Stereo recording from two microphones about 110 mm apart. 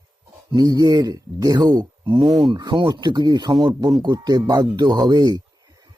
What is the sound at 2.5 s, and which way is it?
Speech, 45° right (ahead or behind).